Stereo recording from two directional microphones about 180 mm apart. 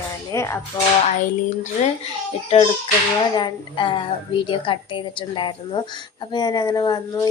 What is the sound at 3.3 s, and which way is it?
Speech, 25° left (ahead or behind).